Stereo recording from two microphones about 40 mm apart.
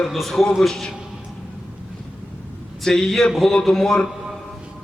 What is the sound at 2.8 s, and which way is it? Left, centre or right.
A man's voice, centre.